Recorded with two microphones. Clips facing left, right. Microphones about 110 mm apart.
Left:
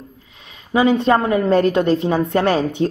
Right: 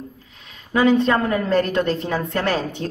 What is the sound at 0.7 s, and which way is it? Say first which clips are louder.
A woman's voice: left 2 dB; 15° left (ahead or behind).